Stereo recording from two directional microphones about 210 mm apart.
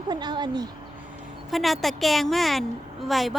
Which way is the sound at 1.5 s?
Centre (ahead or behind).